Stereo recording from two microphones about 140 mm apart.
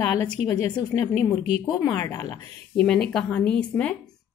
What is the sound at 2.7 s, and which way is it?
Speech, 5° left (ahead or behind).